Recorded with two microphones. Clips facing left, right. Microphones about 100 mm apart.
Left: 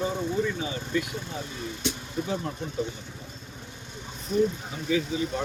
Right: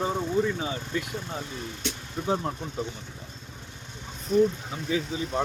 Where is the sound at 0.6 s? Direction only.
35° right (ahead or behind).